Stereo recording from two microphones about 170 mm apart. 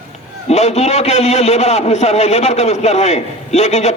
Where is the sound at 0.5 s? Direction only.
40° left (ahead or behind).